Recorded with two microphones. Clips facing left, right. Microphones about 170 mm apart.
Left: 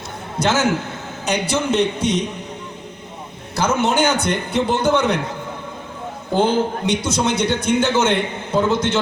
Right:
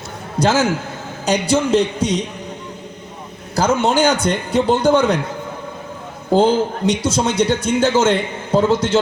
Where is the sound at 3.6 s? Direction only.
35° right (ahead or behind).